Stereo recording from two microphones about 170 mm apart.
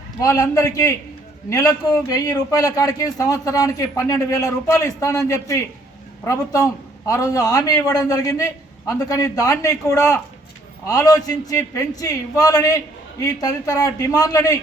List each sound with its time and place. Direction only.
0.2 s a man's voice: 20° left (ahead or behind)